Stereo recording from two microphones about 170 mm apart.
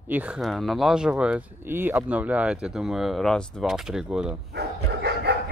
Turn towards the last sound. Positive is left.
turn(degrees=-75)  # may be behind; listen again after turning